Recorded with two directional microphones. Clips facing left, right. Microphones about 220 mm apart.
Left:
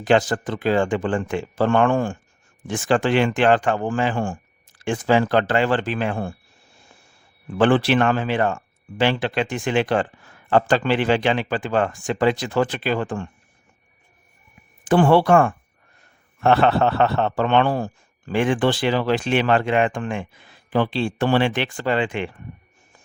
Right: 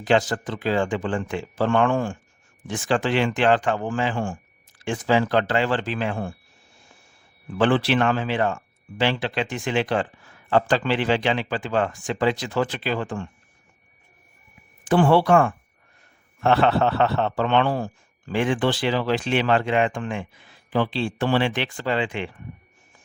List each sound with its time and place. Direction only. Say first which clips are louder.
0.0 s a man's voice: left 3 dB; 50° left (ahead or behind)
7.6 s a man's voice: left 3 dB; 50° left (ahead or behind)
14.8 s a man's voice: left 2 dB; 50° left (ahead or behind)